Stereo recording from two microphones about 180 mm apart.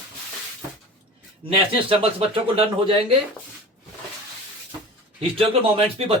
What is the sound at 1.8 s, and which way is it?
Speech, 30° right (ahead or behind).